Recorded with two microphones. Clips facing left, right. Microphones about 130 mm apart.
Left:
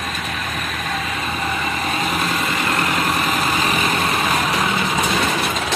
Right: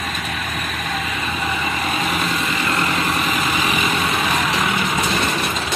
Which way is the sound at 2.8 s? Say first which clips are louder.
Left 1 dB; 50° left (ahead or behind).